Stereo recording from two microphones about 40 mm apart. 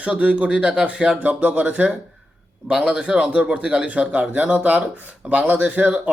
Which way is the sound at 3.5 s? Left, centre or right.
Right.